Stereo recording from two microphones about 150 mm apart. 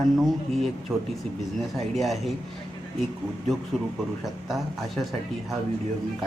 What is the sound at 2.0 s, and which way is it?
Speech, centre (ahead or behind).